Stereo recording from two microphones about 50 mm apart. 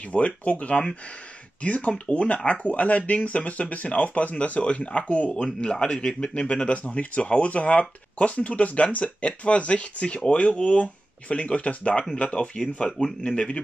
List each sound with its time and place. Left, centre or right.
0.1 s speech: left